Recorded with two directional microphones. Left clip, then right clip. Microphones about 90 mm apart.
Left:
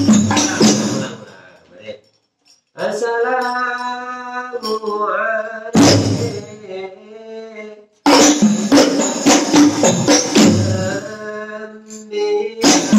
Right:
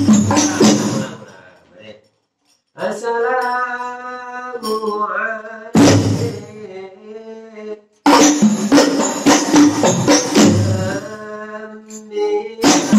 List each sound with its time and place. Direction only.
0.0 s music: 35° left (ahead or behind)
2.8 s music: 35° left (ahead or behind)